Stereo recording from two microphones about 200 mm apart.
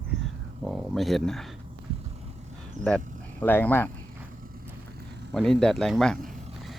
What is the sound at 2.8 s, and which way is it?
Speech, 20° left (ahead or behind).